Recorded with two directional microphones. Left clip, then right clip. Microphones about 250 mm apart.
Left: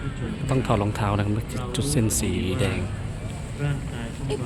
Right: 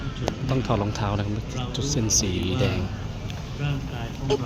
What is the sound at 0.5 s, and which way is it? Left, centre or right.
Speech, centre.